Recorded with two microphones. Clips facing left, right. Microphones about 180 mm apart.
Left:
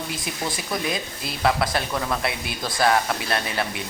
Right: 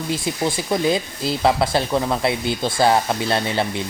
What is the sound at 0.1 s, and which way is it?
Speech, 25° right (ahead or behind).